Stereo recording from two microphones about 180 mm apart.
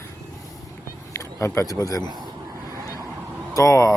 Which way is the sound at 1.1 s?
15° left (ahead or behind).